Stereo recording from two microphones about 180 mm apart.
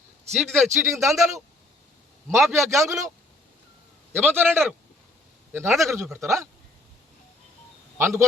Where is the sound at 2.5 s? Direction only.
15° right (ahead or behind).